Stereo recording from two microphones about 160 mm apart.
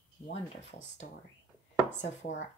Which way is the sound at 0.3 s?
45° left (ahead or behind).